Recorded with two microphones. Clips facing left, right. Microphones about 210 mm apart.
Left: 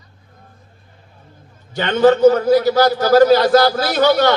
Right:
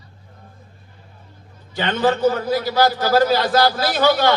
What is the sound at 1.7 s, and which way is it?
A man's voice, 45° left (ahead or behind).